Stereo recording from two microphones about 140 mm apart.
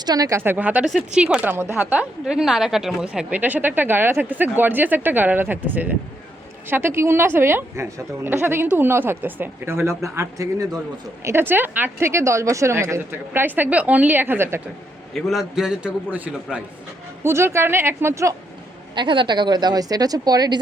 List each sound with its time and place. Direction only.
0.0 s a woman's voice: 25° right (ahead or behind)
15.1 s a man's voice: centre (ahead or behind); by 18.3 s 20° right (ahead or behind)
18.9 s a woman's voice: 35° right (ahead or behind)